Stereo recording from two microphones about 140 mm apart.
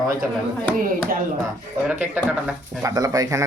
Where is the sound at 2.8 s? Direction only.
25° right (ahead or behind).